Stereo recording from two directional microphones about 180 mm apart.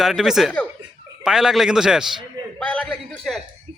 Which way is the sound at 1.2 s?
5° right (ahead or behind).